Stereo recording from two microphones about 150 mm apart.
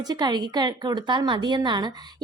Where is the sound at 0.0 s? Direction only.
30° right (ahead or behind).